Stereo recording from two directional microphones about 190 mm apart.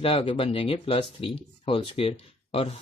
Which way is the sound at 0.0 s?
30° left (ahead or behind).